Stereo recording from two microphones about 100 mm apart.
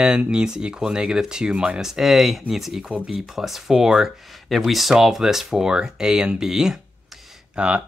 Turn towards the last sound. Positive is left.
turn(degrees=-10)  # may be behind; listen again after turning